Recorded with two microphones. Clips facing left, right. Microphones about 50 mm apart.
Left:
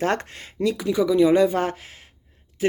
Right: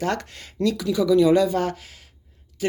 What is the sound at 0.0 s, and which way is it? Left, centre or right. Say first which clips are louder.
Speech: left 2 dB; left.